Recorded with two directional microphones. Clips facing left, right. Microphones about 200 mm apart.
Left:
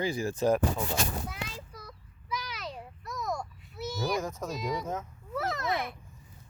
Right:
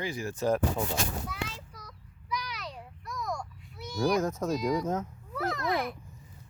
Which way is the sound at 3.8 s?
5° left (ahead or behind).